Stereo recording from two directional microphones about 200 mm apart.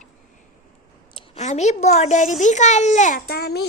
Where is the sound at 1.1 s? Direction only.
35° left (ahead or behind).